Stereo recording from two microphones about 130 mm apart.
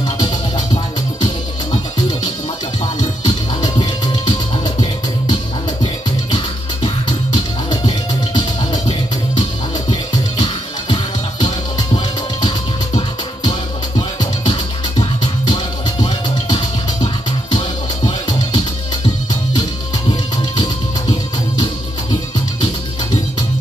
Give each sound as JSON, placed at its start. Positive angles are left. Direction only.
{"t": 3.3, "sound": "music", "side_deg": 35}
{"t": 15.0, "sound": "music", "side_deg": 35}
{"t": 20.1, "sound": "music", "side_deg": 35}